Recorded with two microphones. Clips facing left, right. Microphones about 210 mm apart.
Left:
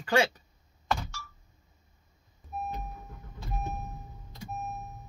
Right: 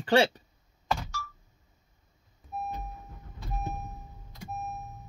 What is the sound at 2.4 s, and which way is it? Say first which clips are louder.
Beep: right 1 dB; centre (ahead or behind).